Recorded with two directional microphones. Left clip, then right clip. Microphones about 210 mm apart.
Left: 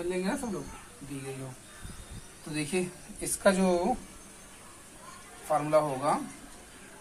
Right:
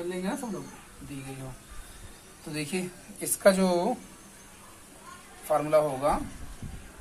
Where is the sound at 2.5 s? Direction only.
30° right (ahead or behind).